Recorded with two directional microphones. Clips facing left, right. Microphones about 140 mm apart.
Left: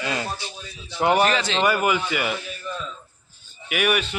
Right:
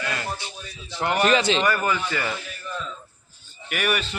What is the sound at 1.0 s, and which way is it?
A man's voice, 15° left (ahead or behind).